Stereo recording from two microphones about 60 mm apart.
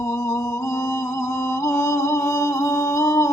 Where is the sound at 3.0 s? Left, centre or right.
Left.